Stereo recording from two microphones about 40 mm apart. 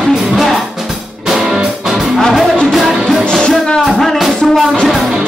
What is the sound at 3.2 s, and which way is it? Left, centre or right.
Music, left.